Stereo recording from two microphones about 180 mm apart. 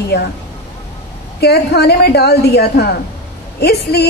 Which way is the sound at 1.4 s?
65° left (ahead or behind).